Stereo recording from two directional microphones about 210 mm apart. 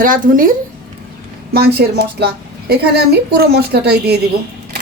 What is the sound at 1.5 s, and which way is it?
A woman's voice, 45° right (ahead or behind).